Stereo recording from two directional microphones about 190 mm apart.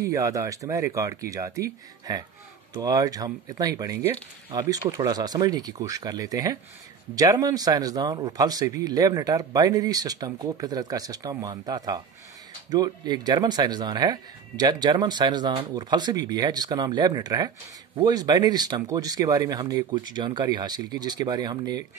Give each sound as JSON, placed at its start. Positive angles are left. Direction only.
{"t": 0.0, "sound": "speech", "side_deg": -15}